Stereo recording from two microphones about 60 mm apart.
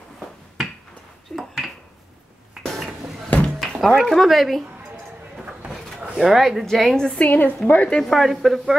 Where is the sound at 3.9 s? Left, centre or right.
Centre.